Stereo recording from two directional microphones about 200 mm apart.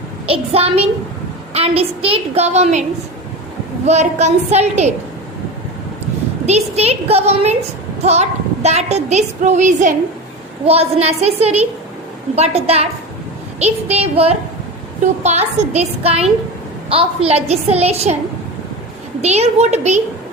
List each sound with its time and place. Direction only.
0.3 s a woman's voice: 30° right (ahead or behind)
3.8 s a woman's voice: 35° right (ahead or behind)
6.4 s a woman's voice: 30° right (ahead or behind)
19.2 s a woman's voice: 35° right (ahead or behind)